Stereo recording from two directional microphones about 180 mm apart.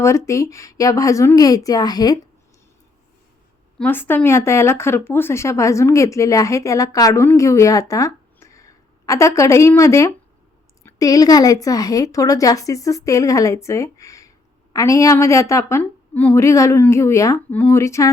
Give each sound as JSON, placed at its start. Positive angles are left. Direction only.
{"t": 0.0, "sound": "a woman's voice", "side_deg": 15}
{"t": 3.8, "sound": "a woman's voice", "side_deg": 10}